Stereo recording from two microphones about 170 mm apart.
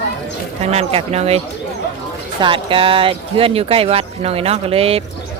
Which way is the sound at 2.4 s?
30° right (ahead or behind).